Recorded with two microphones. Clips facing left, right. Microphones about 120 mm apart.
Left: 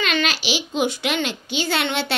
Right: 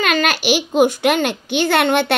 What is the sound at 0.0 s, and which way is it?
A woman's voice, 50° right (ahead or behind).